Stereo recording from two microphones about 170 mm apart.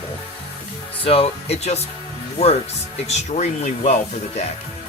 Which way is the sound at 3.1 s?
45° left (ahead or behind).